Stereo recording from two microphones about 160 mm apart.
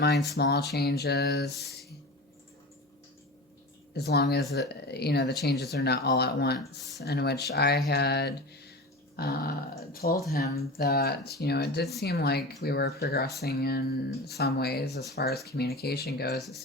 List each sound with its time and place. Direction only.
0.3 s speech: 90° left
3.9 s speech: 90° left
9.1 s speech: 75° left (ahead or behind)